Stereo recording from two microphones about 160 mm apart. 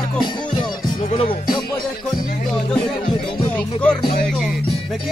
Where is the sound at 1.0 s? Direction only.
50° left (ahead or behind).